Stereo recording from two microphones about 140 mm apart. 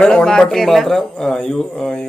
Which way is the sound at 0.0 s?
5° left (ahead or behind).